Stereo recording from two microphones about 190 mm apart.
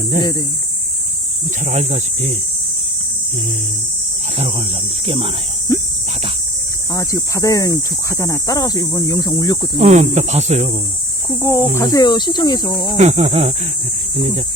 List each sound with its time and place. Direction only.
0.2 s speech: 20° left (ahead or behind)
1.6 s speech: 35° right (ahead or behind)
5.0 s speech: 30° right (ahead or behind)
5.7 s speech: 15° left (ahead or behind)
6.9 s speech: 15° left (ahead or behind)
9.7 s speech: 35° right (ahead or behind)
11.3 s speech: 15° left (ahead or behind)
13.0 s speech: 35° right (ahead or behind)